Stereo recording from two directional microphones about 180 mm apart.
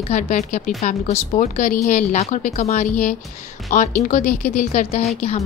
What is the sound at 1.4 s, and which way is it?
A woman's voice, 50° left (ahead or behind).